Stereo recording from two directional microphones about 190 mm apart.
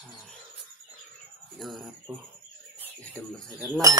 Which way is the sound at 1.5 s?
Centre (ahead or behind).